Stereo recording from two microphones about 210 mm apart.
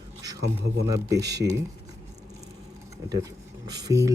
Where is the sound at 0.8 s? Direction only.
15° right (ahead or behind).